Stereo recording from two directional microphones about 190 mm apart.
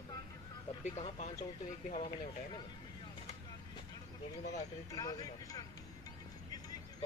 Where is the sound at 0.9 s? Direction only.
35° left (ahead or behind).